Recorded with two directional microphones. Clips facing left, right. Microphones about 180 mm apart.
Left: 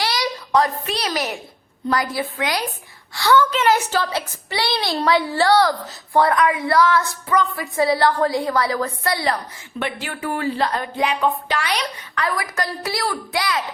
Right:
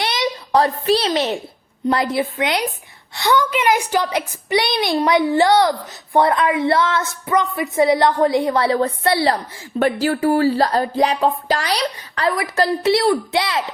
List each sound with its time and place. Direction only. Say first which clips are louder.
0.0 s a child's voice: right 2 dB; 25° right (ahead or behind)